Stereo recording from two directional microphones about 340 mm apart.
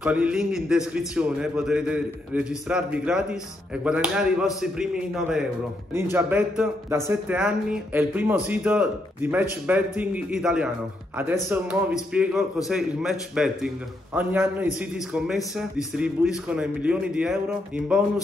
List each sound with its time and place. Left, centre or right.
0.0 s a man's voice: centre